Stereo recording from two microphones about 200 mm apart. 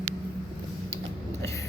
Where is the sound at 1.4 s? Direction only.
15° left (ahead or behind).